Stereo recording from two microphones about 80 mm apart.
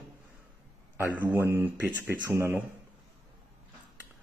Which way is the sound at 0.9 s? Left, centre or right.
Right.